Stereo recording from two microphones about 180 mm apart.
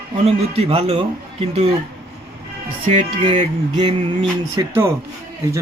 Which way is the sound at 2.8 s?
30° right (ahead or behind).